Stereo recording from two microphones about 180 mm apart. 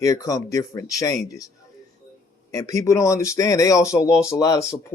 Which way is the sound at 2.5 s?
20° left (ahead or behind).